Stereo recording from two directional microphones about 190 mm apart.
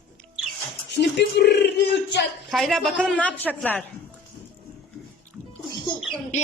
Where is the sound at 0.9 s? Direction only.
60° left (ahead or behind).